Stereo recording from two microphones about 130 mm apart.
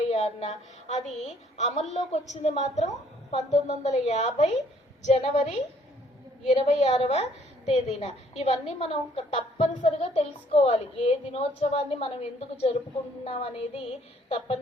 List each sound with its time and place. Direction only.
0.1 s a woman's voice: 60° left (ahead or behind)